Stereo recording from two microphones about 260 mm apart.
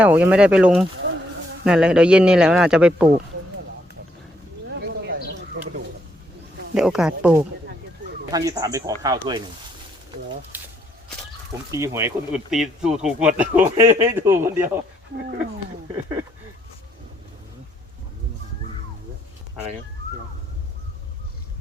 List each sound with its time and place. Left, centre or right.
0.0 s speech: centre
5.6 s a sound: right
6.7 s speech: centre
10.5 s a sound: centre
11.7 s speech: centre
15.9 s speech: centre